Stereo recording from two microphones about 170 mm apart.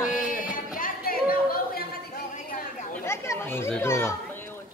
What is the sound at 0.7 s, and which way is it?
Chatter, 55° left (ahead or behind).